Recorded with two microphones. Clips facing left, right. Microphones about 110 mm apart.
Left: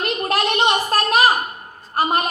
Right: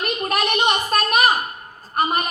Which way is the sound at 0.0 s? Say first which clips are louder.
Left 2 dB; 30° left (ahead or behind).